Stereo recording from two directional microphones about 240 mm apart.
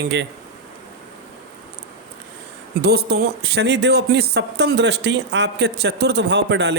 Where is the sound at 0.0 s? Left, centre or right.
Right.